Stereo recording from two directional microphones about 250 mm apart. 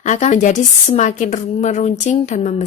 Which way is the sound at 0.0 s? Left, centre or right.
Left.